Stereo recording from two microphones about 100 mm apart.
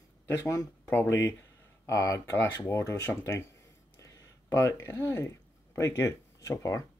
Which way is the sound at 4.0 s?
35° left (ahead or behind).